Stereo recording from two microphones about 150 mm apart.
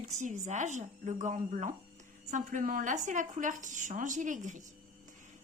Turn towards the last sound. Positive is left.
turn(degrees=-55)  # may be behind; listen again after turning